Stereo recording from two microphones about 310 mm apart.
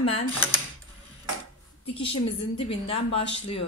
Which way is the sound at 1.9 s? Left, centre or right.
Centre.